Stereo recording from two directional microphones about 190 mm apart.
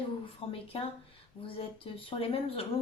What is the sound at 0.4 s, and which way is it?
A woman's voice, 30° left (ahead or behind).